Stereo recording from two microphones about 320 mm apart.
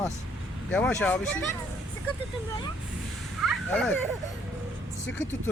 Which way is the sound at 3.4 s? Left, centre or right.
Centre.